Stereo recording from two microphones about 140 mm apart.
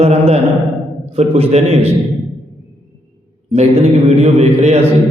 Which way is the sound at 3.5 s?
45° right (ahead or behind).